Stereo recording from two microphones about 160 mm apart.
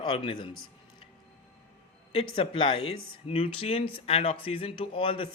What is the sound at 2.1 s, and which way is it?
Speech, 35° left (ahead or behind).